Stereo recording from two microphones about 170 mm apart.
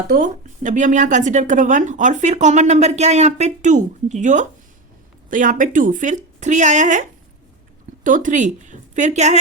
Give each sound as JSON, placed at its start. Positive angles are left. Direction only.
{"t": 0.1, "sound": "speech", "side_deg": -50}